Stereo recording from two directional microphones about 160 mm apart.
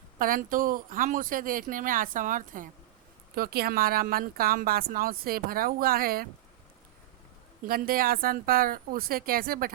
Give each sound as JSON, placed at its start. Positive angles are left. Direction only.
{"t": 0.2, "sound": "speech", "side_deg": -60}
{"t": 3.3, "sound": "speech", "side_deg": -70}
{"t": 7.7, "sound": "speech", "side_deg": -65}